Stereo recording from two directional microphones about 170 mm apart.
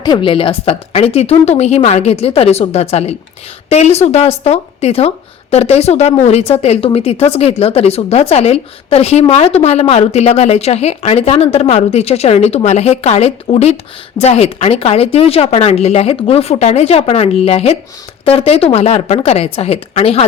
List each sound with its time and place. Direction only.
0.0 s a woman's voice: 30° left (ahead or behind)